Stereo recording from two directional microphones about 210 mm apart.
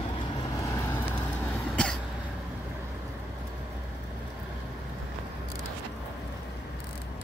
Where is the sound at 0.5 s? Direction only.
15° left (ahead or behind).